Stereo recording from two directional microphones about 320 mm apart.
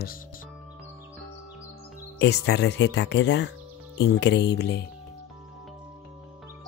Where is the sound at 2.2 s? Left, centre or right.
Left.